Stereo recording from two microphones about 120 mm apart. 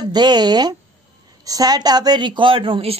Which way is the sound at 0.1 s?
35° right (ahead or behind).